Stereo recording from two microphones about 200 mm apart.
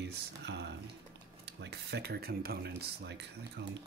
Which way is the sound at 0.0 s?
60° right (ahead or behind).